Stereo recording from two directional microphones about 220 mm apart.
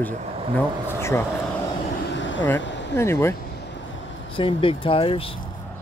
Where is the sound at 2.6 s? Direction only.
55° left (ahead or behind).